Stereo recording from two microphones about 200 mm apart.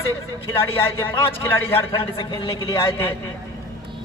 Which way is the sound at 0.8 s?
10° left (ahead or behind).